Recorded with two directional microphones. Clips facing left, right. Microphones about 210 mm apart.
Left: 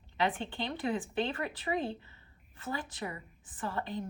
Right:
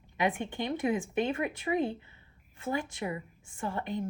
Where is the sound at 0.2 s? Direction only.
15° right (ahead or behind).